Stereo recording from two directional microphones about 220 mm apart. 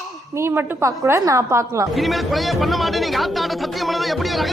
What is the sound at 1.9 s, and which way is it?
Speech, centre (ahead or behind).